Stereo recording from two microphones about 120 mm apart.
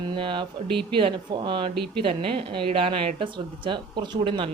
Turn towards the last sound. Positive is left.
turn(degrees=-45)  # may be behind; listen again after turning